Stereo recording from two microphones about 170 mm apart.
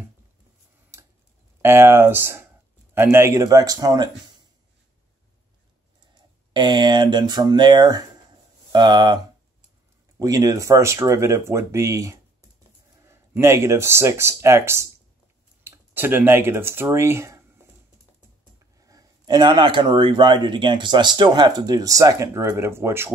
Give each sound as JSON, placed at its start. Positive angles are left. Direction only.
{"t": 0.9, "sound": "tick-tock", "side_deg": -15}
{"t": 1.6, "sound": "speech", "side_deg": -15}
{"t": 6.5, "sound": "speech", "side_deg": -25}
{"t": 18.8, "sound": "speech", "side_deg": -20}